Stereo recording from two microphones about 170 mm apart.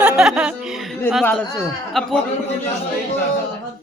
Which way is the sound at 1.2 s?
10° left (ahead or behind).